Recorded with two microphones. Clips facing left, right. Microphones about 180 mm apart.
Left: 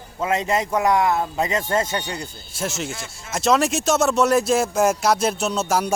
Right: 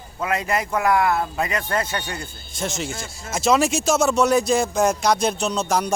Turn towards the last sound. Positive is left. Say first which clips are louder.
# even
turn(degrees=5)  # may be behind; listen again after turning